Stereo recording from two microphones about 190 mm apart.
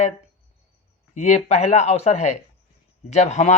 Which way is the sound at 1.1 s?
35° left (ahead or behind).